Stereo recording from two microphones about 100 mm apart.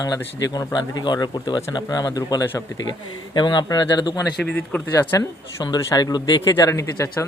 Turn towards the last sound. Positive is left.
turn(degrees=30)  # may be behind; listen again after turning